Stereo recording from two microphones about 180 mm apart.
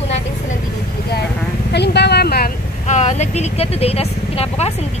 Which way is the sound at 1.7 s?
70° left (ahead or behind).